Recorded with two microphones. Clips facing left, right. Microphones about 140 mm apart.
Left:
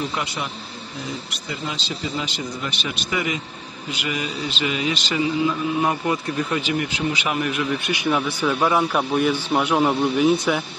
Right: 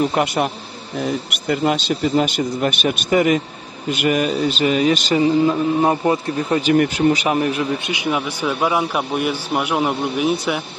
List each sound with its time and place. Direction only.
0.0 s speech: 55° right (ahead or behind); by 6.6 s 35° right (ahead or behind)
6.6 s speech: 50° right (ahead or behind)
7.2 s a man's voice: 35° right (ahead or behind)
7.8 s a man's voice: 20° right (ahead or behind)